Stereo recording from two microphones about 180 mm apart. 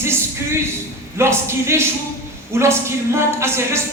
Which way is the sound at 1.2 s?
15° right (ahead or behind).